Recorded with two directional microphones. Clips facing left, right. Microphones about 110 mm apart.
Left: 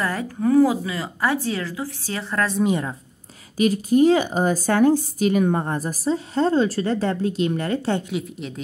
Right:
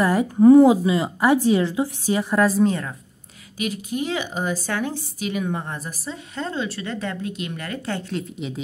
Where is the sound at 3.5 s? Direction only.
40° left (ahead or behind).